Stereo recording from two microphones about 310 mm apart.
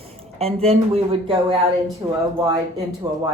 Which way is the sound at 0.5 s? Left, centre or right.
Centre.